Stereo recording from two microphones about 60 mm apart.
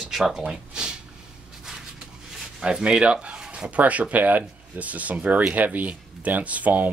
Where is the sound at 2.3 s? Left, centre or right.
Centre.